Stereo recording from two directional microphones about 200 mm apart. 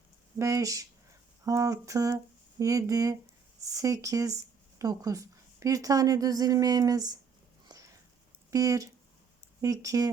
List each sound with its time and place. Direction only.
0.3 s a woman's voice: 15° right (ahead or behind)
8.4 s a woman's voice: 15° right (ahead or behind)